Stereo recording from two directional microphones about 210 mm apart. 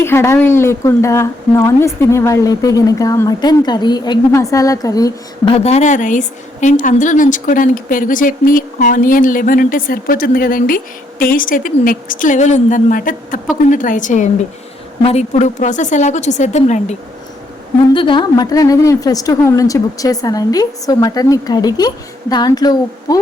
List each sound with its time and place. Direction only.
0.0 s a woman's voice: 10° left (ahead or behind)
5.5 s a woman's voice: 30° left (ahead or behind)
17.9 s a woman's voice: 25° left (ahead or behind)